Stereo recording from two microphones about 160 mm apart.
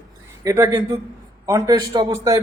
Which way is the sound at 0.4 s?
20° right (ahead or behind).